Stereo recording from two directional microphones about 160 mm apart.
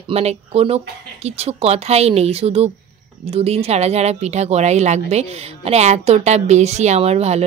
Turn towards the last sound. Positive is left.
turn(degrees=-40)  # may be behind; listen again after turning